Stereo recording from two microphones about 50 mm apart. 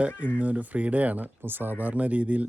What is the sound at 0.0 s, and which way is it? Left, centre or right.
Speech, right.